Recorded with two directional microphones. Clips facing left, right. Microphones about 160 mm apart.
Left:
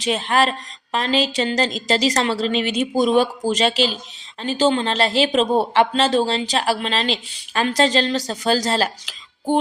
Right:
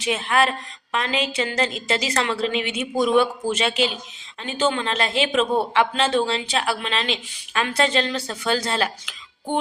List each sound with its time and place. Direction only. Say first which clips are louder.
0.0 s a man's voice: left 2 dB; 30° left (ahead or behind)